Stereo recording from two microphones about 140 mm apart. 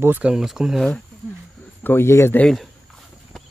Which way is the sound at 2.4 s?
Centre (ahead or behind).